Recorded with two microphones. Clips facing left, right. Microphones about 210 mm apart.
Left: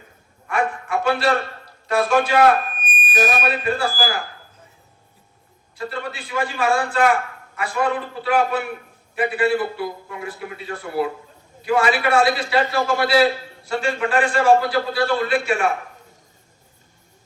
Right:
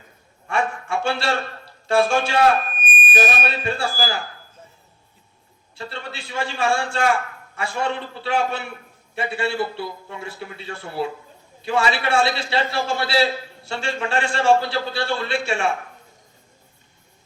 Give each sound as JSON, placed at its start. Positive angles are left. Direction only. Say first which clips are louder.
{"t": 0.4, "sound": "a sound", "louder": "left 1 dB", "side_deg": -25}
{"t": 1.9, "sound": "a man's voice", "louder": "left 1 dB", "side_deg": -25}
{"t": 5.7, "sound": "a man's voice", "louder": "left 5 dB", "side_deg": -25}